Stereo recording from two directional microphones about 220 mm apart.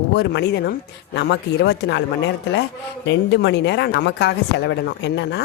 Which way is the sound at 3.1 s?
50° left (ahead or behind).